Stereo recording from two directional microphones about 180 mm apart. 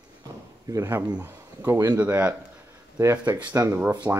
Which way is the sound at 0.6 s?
15° right (ahead or behind).